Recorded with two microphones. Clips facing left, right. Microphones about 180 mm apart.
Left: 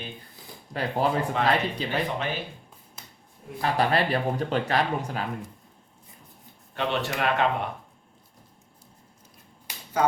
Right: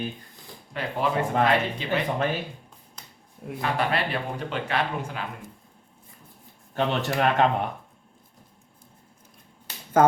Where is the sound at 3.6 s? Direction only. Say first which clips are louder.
Left 2 dB; 35° left (ahead or behind).